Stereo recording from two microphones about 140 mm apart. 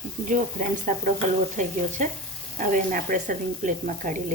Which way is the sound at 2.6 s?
75° right (ahead or behind).